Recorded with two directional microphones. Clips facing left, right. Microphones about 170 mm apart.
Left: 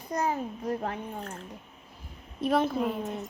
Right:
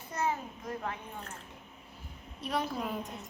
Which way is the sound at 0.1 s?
35° left (ahead or behind).